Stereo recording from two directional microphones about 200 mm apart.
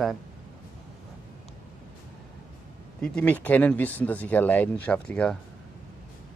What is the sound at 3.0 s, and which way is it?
Speech, 5° left (ahead or behind).